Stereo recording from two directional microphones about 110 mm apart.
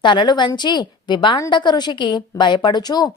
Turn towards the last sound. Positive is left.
turn(degrees=40)  # may be behind; listen again after turning